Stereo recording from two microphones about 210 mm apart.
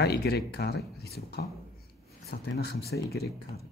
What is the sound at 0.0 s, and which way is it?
Speech, 50° left (ahead or behind).